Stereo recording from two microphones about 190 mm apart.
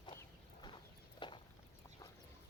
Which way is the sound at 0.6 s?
25° left (ahead or behind).